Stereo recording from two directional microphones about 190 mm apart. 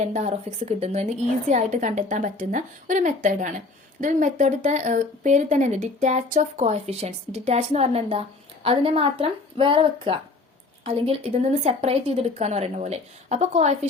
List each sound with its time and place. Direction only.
0.1 s speech: 35° right (ahead or behind)